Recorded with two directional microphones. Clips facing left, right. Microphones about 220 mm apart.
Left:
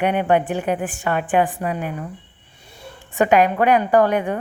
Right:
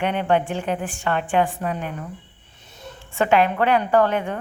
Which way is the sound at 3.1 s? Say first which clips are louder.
Left 3 dB; 15° left (ahead or behind).